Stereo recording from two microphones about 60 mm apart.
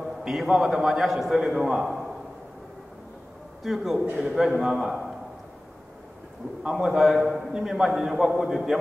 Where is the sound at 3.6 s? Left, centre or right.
Centre.